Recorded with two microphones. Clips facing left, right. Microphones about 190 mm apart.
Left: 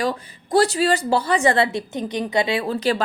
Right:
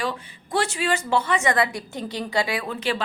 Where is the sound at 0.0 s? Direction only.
40° left (ahead or behind).